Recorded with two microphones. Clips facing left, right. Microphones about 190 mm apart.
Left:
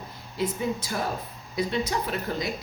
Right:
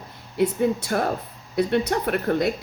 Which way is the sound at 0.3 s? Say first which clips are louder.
Right 7 dB; 65° right (ahead or behind).